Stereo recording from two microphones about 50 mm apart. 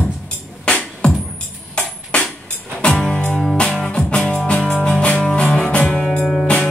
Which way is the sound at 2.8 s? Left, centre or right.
Centre.